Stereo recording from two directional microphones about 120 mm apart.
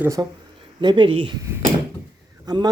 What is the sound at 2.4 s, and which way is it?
Speech, 35° right (ahead or behind).